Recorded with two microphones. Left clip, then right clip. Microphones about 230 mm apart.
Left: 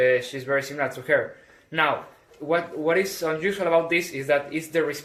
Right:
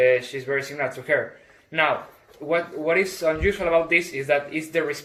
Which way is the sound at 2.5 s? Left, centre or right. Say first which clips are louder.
Even; centre.